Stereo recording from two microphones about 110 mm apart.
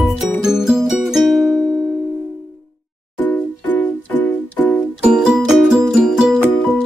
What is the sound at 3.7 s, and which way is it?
Music, 15° left (ahead or behind).